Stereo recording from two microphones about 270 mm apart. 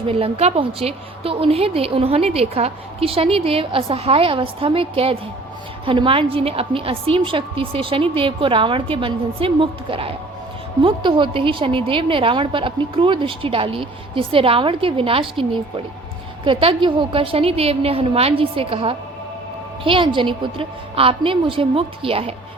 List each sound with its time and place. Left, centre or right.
0.1 s a woman's voice: right